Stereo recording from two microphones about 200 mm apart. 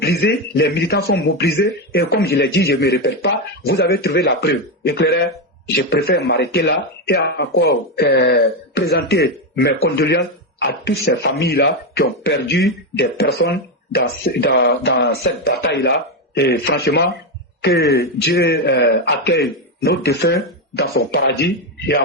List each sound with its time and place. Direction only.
0.0 s a man's voice: 50° left (ahead or behind)